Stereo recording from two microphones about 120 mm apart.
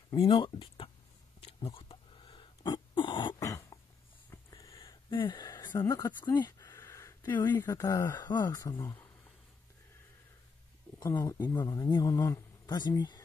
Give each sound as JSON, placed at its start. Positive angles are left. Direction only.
{"t": 0.1, "sound": "speech", "side_deg": 45}
{"t": 1.4, "sound": "a sound", "side_deg": 50}
{"t": 3.3, "sound": "throat clearing", "side_deg": 25}
{"t": 4.3, "sound": "a sound", "side_deg": 30}
{"t": 4.7, "sound": "a sound", "side_deg": 45}
{"t": 5.8, "sound": "speech", "side_deg": 25}
{"t": 6.2, "sound": "speech", "side_deg": 35}
{"t": 6.7, "sound": "speech", "side_deg": 25}
{"t": 8.2, "sound": "speech", "side_deg": 35}
{"t": 11.1, "sound": "speech", "side_deg": 20}
{"t": 11.5, "sound": "speech", "side_deg": 35}
{"t": 12.1, "sound": "speech", "side_deg": 25}
{"t": 12.6, "sound": "speech", "side_deg": 35}